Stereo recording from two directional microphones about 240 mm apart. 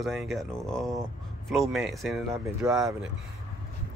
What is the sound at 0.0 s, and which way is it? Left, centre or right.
Speech, centre.